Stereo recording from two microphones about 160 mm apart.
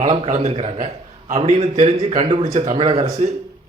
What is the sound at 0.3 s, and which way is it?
A man's voice, 40° right (ahead or behind).